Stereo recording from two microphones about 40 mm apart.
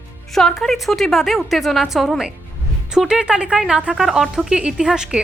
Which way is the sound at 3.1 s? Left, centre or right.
Right.